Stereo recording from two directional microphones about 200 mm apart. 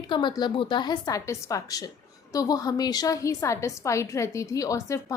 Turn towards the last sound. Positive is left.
turn(degrees=15)  # may be behind; listen again after turning